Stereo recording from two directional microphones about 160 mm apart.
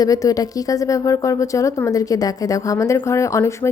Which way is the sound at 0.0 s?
20° left (ahead or behind).